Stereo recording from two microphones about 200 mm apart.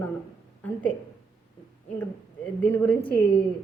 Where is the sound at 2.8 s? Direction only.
5° left (ahead or behind).